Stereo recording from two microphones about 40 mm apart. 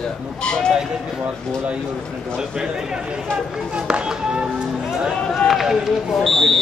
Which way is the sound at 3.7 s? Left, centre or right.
Right.